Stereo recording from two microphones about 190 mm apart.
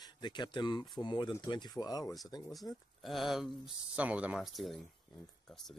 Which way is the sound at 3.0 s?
Centre (ahead or behind).